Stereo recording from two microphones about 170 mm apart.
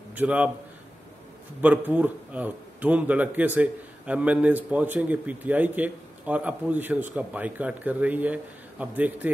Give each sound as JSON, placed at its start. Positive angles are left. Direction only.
{"t": 0.1, "sound": "a man's voice", "side_deg": -10}
{"t": 1.6, "sound": "speech", "side_deg": -10}